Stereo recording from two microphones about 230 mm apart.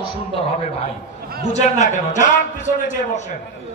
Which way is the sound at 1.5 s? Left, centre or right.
Left.